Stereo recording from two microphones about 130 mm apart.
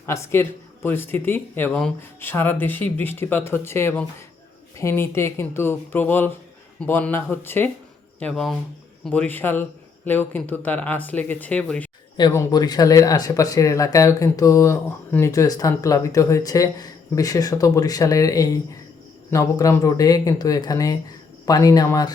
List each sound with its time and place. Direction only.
0.0 s speech: 20° left (ahead or behind)
8.2 s speech: 5° left (ahead or behind)
9.1 s speech: 15° left (ahead or behind)
12.3 s speech: 25° left (ahead or behind)